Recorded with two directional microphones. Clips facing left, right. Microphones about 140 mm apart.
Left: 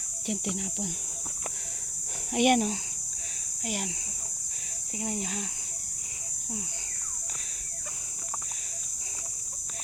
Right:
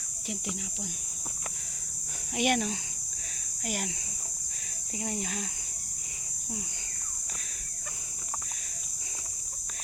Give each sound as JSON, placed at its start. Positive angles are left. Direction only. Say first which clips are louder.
{"t": 0.3, "sound": "speech", "louder": "left 5 dB", "side_deg": 60}
{"t": 2.3, "sound": "speech", "louder": "left 5 dB", "side_deg": 50}
{"t": 3.6, "sound": "speech", "louder": "left 1 dB", "side_deg": 25}
{"t": 4.9, "sound": "speech", "louder": "left 1 dB", "side_deg": 25}